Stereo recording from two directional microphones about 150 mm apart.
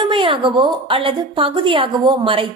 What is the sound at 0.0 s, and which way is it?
Speech, 35° right (ahead or behind).